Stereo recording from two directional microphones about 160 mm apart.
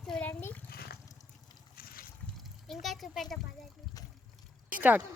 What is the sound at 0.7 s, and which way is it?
Water, 75° left (ahead or behind).